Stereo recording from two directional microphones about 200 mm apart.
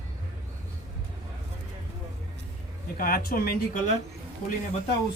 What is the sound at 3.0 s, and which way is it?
Speech, 45° left (ahead or behind).